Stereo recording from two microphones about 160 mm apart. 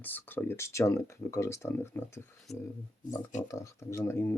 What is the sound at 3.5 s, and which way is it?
Speech, 20° left (ahead or behind).